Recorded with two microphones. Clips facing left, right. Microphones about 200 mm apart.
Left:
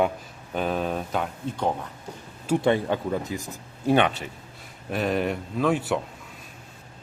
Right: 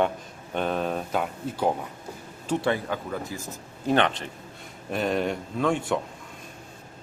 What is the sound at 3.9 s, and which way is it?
Speech, 10° left (ahead or behind).